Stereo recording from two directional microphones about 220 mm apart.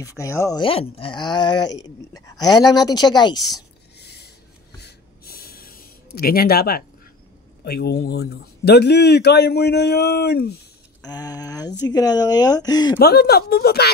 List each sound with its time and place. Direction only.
0.0 s speech: 15° left (ahead or behind)
4.0 s a sound: 45° left (ahead or behind)
7.6 s speech: 45° left (ahead or behind)
11.0 s speech: 15° left (ahead or behind)
13.0 s speech: 45° left (ahead or behind)